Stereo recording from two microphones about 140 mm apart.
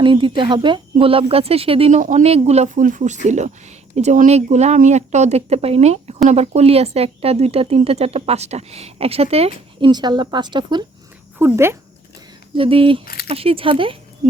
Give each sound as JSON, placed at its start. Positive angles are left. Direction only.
{"t": 0.0, "sound": "speech", "side_deg": -35}
{"t": 2.0, "sound": "speech", "side_deg": -60}
{"t": 2.8, "sound": "speech", "side_deg": -65}
{"t": 9.9, "sound": "speech", "side_deg": -30}
{"t": 11.3, "sound": "speech", "side_deg": -15}
{"t": 12.5, "sound": "speech", "side_deg": -40}